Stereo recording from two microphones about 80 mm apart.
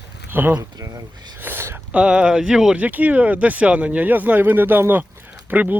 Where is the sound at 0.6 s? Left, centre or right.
Right.